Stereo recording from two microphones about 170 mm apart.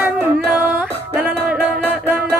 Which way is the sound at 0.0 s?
10° right (ahead or behind).